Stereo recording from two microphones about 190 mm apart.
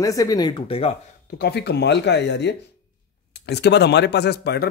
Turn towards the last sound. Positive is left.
turn(degrees=55)  # may be behind; listen again after turning